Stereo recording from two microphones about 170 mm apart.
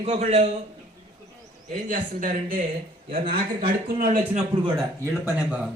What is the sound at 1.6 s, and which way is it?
Speech, 50° right (ahead or behind).